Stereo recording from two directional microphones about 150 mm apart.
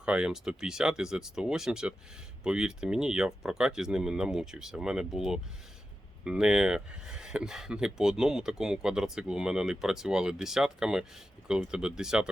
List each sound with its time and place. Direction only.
0.0 s speech: 5° right (ahead or behind)